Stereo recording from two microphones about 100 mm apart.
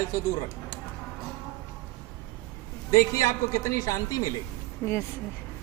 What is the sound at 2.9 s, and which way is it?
A man's voice, 35° left (ahead or behind).